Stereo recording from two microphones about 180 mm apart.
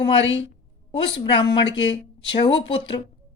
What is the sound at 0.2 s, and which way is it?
Speech, 90° left.